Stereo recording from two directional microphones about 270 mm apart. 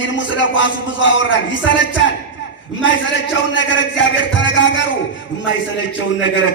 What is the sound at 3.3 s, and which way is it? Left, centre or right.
A man's voice, left.